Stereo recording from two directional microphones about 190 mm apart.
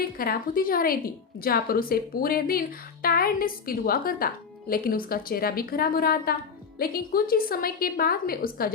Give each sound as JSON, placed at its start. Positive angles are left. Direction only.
{"t": 0.0, "sound": "a woman's voice", "side_deg": 50}